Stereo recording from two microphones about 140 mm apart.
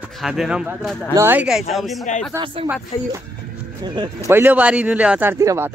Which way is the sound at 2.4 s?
35° right (ahead or behind).